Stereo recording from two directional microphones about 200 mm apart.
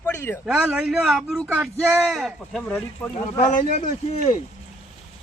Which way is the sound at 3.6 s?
35° left (ahead or behind).